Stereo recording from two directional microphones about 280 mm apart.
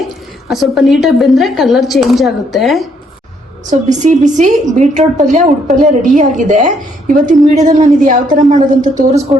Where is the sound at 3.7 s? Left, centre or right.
Right.